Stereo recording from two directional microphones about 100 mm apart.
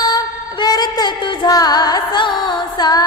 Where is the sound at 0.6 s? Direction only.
40° left (ahead or behind).